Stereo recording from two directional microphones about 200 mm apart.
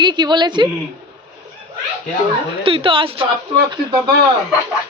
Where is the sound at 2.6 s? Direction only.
25° right (ahead or behind).